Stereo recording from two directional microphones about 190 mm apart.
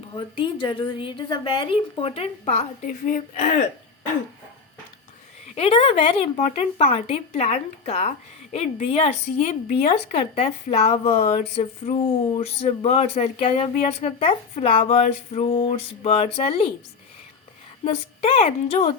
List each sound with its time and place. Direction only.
0.1 s a woman's voice: 25° left (ahead or behind)
5.5 s speech: 30° left (ahead or behind)
17.8 s speech: 30° left (ahead or behind)